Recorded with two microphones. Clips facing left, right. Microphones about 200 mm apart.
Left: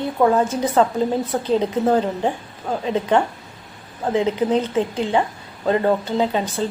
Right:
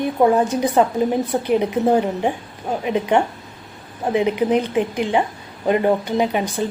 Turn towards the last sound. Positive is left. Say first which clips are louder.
# right 1 dB
turn(degrees=-15)  # may be behind; listen again after turning